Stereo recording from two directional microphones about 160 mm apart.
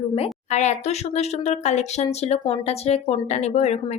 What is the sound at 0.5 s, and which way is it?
Speech, 45° left (ahead or behind).